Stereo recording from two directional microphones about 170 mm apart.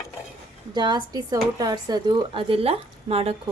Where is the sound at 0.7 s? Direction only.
25° right (ahead or behind).